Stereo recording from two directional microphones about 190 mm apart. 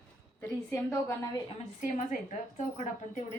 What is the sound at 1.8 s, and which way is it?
A woman's voice, 40° left (ahead or behind).